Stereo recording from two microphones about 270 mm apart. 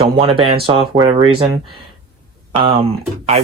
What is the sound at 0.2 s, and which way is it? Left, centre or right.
Speech, centre.